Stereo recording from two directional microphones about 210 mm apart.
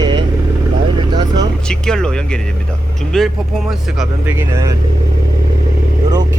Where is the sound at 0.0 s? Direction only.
20° right (ahead or behind).